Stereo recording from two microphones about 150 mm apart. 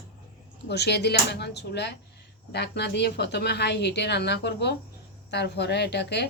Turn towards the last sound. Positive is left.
turn(degrees=90)